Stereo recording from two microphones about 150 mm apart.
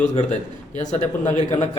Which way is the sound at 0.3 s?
55° left (ahead or behind).